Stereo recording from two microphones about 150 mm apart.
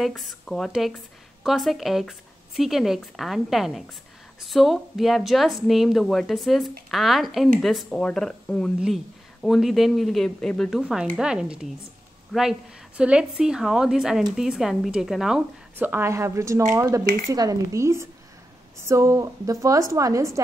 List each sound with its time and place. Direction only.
0.0 s speech: centre (ahead or behind)
15.7 s a woman's voice: 15° right (ahead or behind)